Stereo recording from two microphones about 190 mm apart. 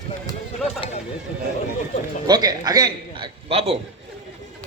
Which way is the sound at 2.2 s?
20° right (ahead or behind).